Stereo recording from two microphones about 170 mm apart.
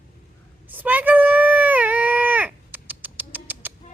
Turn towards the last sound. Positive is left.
turn(degrees=-10)  # may be behind; listen again after turning